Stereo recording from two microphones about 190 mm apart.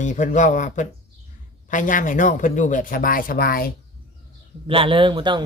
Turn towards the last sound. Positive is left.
turn(degrees=-25)  # may be behind; listen again after turning